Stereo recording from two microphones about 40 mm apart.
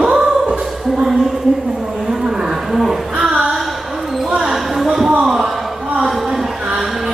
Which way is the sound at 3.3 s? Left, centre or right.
Centre.